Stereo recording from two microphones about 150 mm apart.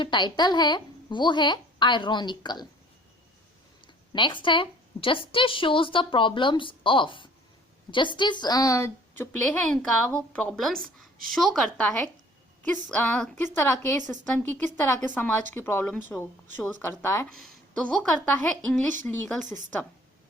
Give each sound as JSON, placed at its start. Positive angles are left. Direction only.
{"t": 0.0, "sound": "a woman's voice", "side_deg": 30}
{"t": 4.1, "sound": "a woman's voice", "side_deg": 30}
{"t": 17.2, "sound": "a woman's voice", "side_deg": 5}